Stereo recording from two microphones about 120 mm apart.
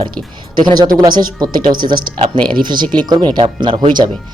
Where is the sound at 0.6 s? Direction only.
35° right (ahead or behind).